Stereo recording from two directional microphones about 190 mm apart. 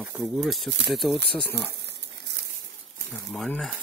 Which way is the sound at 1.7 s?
65° right (ahead or behind).